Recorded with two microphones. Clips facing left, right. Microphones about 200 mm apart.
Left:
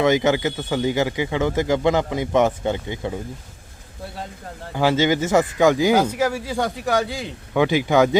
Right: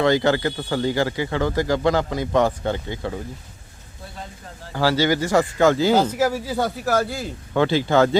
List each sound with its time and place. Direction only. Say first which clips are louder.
0.0 s a man's voice: left 1 dB; 15° left (ahead or behind)
4.7 s a man's voice: left 1 dB; 20° left (ahead or behind)
6.4 s a man's voice: even; 5° right (ahead or behind)
7.5 s a man's voice: left 1 dB; 15° left (ahead or behind)